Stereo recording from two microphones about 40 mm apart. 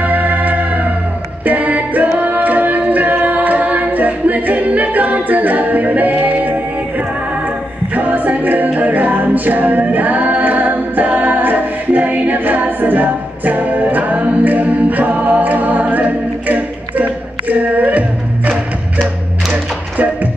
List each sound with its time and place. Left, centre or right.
0.0 s music: right
7.9 s music: right
8.7 s a capella: right
19.5 s music: right